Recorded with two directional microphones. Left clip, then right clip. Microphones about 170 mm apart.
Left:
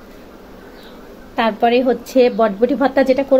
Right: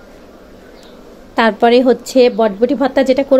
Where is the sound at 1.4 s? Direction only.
45° right (ahead or behind).